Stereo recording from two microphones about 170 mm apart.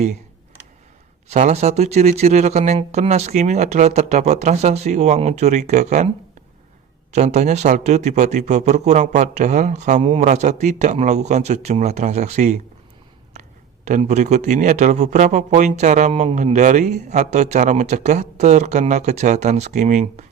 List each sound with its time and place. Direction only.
1.3 s speech: 45° right (ahead or behind)
7.1 s a man's voice: 45° right (ahead or behind)
13.8 s a man's voice: 45° right (ahead or behind)